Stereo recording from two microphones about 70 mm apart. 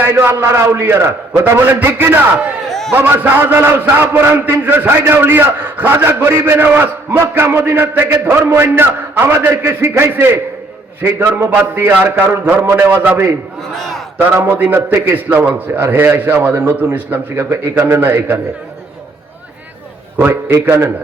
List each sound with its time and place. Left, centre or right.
0.0 s a man's voice: right
2.6 s a sound: centre
2.9 s a man's voice: right
7.2 s a man's voice: right
13.7 s a man's voice: centre
14.3 s a man's voice: right
20.1 s a man's voice: right